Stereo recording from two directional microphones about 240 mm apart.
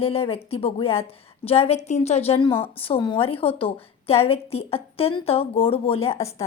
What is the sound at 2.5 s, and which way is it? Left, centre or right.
Speech, centre.